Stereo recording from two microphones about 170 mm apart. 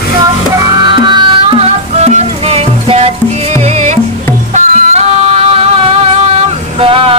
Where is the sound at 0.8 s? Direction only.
25° right (ahead or behind).